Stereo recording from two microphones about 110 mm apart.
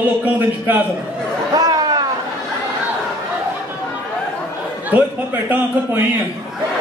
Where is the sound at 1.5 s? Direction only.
35° right (ahead or behind).